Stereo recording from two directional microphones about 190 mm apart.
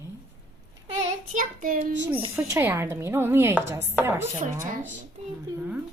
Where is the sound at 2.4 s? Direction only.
15° right (ahead or behind).